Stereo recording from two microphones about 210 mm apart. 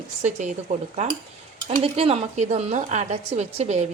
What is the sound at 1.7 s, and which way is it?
Speech, 30° right (ahead or behind).